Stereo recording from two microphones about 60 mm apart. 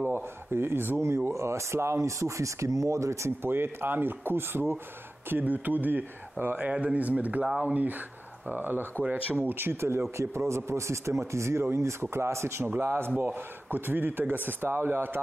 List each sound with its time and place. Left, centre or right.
0.1 s speech: right
1.0 s speech: right
3.4 s speech: right
5.3 s speech: right
12.6 s speech: right